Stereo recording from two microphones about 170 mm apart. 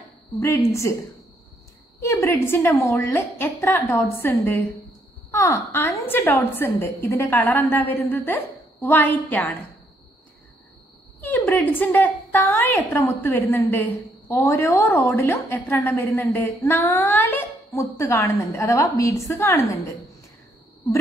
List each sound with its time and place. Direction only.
0.4 s a woman's voice: 15° left (ahead or behind)
2.0 s a woman's voice: 15° left (ahead or behind)
11.1 s a woman's voice: 10° left (ahead or behind)